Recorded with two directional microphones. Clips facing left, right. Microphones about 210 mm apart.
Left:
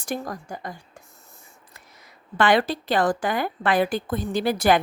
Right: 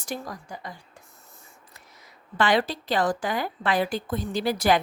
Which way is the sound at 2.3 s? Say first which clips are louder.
Left 3 dB; 55° left (ahead or behind).